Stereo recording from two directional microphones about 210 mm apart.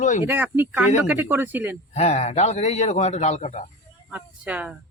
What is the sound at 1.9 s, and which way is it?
Speech, 30° left (ahead or behind).